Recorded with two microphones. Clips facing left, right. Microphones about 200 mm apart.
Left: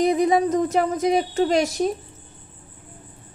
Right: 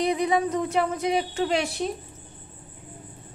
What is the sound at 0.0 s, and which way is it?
A woman's voice, 45° left (ahead or behind).